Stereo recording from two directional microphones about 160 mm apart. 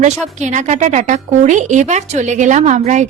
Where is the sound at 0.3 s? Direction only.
45° right (ahead or behind).